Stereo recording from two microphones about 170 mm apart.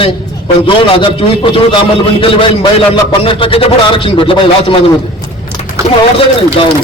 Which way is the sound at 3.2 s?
30° left (ahead or behind).